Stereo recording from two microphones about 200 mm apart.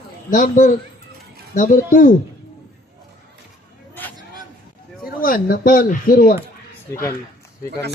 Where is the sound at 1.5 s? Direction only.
40° left (ahead or behind).